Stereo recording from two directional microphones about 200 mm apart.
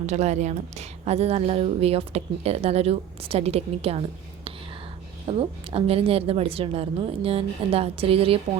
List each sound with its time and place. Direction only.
0.0 s a woman's voice: 35° right (ahead or behind)
5.4 s a woman's voice: 30° right (ahead or behind)